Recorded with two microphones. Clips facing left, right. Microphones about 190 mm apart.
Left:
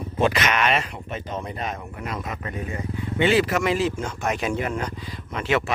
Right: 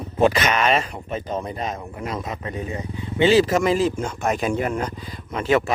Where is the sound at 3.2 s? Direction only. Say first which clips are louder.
Right 4 dB; 40° right (ahead or behind).